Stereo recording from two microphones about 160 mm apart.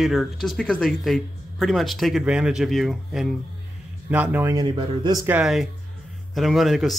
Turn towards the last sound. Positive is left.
turn(degrees=0)  # may be behind; listen again after turning